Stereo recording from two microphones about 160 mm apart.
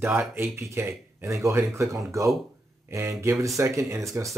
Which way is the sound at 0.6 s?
15° right (ahead or behind).